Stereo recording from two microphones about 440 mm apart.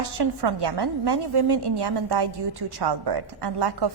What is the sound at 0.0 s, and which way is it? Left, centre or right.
A woman's voice, right.